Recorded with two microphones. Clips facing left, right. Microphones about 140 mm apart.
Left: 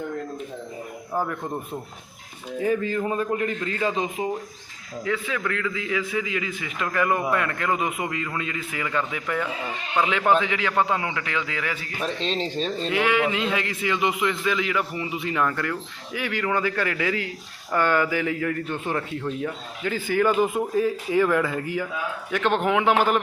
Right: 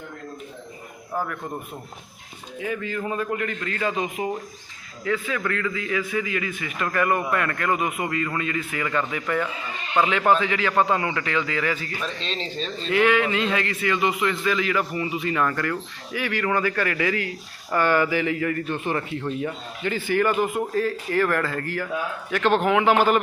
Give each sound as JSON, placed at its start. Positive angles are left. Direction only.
{"t": 1.1, "sound": "a man's voice", "side_deg": 15}
{"t": 2.6, "sound": "a man's voice", "side_deg": 35}
{"t": 5.0, "sound": "a man's voice", "side_deg": 15}
{"t": 6.8, "sound": "a man's voice", "side_deg": 5}
{"t": 7.1, "sound": "a man's voice", "side_deg": 15}
{"t": 10.7, "sound": "a man's voice", "side_deg": -15}
{"t": 10.9, "sound": "a man's voice", "side_deg": 5}
{"t": 12.5, "sound": "speech", "side_deg": 50}
{"t": 12.9, "sound": "a man's voice", "side_deg": 15}